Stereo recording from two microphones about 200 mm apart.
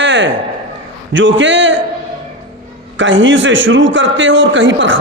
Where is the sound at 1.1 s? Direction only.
70° right (ahead or behind).